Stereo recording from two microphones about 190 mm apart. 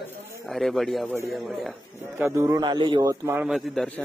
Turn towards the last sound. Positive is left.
turn(degrees=0)  # may be behind; listen again after turning